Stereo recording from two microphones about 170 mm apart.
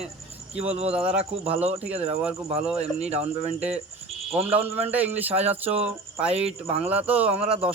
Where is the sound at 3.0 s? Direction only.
40° right (ahead or behind).